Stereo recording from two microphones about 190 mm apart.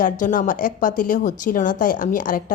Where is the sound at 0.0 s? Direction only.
45° left (ahead or behind).